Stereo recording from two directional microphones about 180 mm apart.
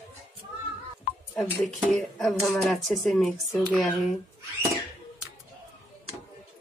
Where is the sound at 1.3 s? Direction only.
Centre (ahead or behind).